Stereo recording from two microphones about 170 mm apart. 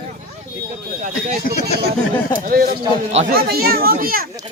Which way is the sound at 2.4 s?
60° right (ahead or behind).